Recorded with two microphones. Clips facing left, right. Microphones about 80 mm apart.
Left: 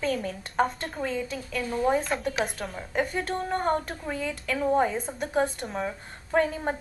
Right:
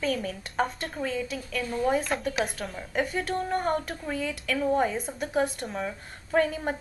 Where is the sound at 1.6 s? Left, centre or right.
Centre.